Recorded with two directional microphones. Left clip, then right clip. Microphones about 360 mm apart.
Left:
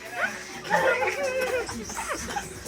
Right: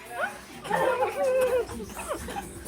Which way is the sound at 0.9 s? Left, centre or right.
Centre.